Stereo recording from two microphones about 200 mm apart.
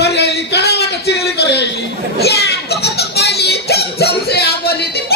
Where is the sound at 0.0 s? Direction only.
55° left (ahead or behind).